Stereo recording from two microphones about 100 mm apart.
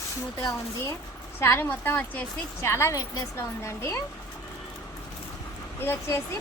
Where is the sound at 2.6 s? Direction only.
25° left (ahead or behind).